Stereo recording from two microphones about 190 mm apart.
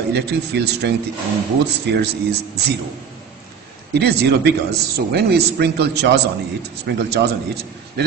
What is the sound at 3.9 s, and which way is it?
A man's voice, 60° right (ahead or behind).